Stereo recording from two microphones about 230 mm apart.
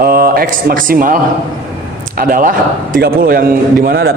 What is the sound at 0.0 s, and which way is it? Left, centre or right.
Speech, right.